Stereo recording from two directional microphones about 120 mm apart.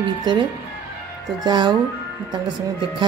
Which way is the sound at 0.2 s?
40° right (ahead or behind).